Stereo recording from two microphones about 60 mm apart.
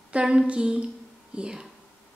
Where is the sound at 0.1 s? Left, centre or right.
Centre.